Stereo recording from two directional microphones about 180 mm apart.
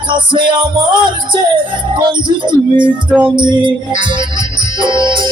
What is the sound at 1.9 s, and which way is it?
Music, 25° right (ahead or behind).